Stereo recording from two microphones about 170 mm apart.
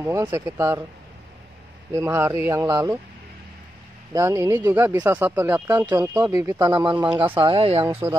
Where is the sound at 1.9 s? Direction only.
15° right (ahead or behind).